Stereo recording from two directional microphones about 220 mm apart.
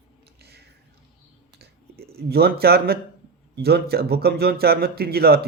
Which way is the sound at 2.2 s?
45° right (ahead or behind).